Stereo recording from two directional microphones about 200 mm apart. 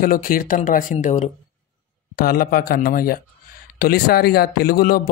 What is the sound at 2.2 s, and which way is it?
Speech, 50° left (ahead or behind).